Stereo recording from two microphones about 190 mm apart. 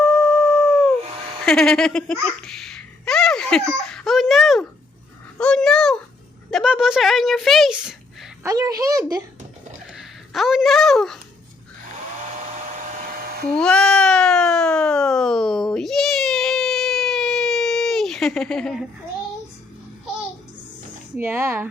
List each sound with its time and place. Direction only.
0.0 s howl: 5° left (ahead or behind)
1.0 s a sound: 30° right (ahead or behind)
1.5 s speech: 5° left (ahead or behind)
2.4 s giggle: centre (ahead or behind)
5.4 s speech: 5° left (ahead or behind)
8.4 s a woman's voice: 20° right (ahead or behind)
9.9 s speech: centre (ahead or behind)
12.3 s hair dryer: 45° right (ahead or behind)
13.6 s cat: 5° left (ahead or behind)
21.2 s speech: 10° right (ahead or behind)